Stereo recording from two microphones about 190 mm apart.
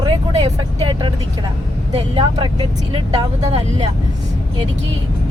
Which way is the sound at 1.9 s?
30° right (ahead or behind).